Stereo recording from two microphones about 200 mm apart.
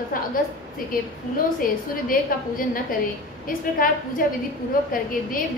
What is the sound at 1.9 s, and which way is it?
A woman's voice, 45° left (ahead or behind).